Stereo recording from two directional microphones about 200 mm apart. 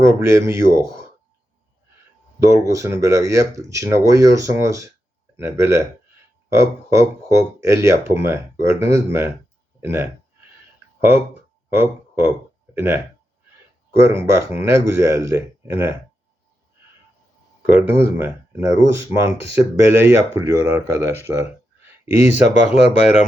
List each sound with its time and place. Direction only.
0.0 s speech: 15° right (ahead or behind)
2.4 s speech: 15° right (ahead or behind)
11.7 s speech: 10° right (ahead or behind)
17.7 s speech: 10° right (ahead or behind)
22.3 s speech: 35° left (ahead or behind)